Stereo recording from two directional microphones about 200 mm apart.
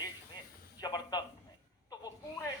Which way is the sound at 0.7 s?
20° left (ahead or behind).